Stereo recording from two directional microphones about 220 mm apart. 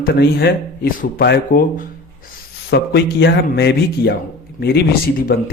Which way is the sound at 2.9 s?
50° left (ahead or behind).